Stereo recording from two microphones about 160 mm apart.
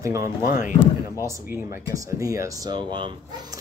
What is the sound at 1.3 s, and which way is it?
Speech, 15° right (ahead or behind).